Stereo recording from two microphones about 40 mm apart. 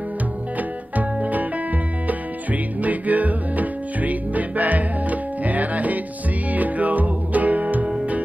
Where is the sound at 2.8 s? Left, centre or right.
Right.